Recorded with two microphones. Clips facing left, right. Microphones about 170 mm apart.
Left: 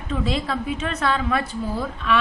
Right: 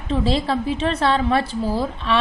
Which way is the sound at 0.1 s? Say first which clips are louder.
Right 4 dB; 30° right (ahead or behind).